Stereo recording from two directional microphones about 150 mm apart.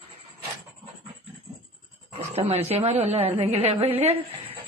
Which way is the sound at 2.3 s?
45° right (ahead or behind).